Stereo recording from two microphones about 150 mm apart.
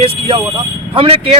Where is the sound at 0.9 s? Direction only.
40° right (ahead or behind).